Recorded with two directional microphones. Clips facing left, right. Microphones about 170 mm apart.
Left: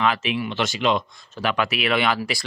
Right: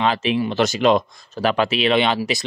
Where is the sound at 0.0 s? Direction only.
30° right (ahead or behind).